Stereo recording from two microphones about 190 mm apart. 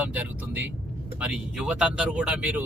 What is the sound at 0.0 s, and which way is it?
Speech, 5° right (ahead or behind).